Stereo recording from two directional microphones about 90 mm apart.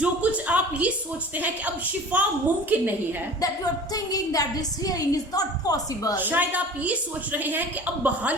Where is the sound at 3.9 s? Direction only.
45° left (ahead or behind).